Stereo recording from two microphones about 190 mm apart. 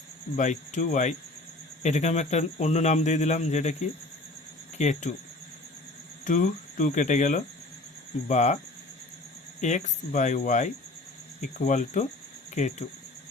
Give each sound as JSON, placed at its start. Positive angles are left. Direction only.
{"t": 0.3, "sound": "speech", "side_deg": 40}
{"t": 6.2, "sound": "speech", "side_deg": 40}
{"t": 9.6, "sound": "speech", "side_deg": 40}